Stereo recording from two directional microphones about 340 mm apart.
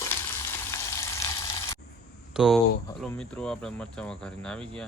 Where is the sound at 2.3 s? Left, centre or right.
Centre.